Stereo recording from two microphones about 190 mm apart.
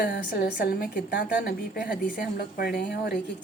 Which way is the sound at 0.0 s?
55° left (ahead or behind).